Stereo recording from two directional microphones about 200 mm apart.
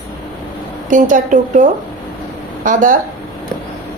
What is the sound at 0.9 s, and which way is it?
Speech, 40° right (ahead or behind).